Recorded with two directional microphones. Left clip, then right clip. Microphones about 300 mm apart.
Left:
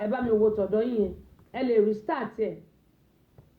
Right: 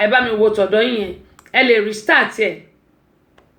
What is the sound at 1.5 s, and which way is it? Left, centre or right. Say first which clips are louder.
Speech: right 10 dB; centre.